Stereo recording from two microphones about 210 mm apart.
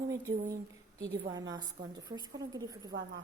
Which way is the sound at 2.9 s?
50° right (ahead or behind).